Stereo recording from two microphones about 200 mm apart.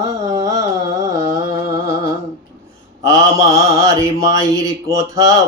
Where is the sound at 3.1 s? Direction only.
15° right (ahead or behind).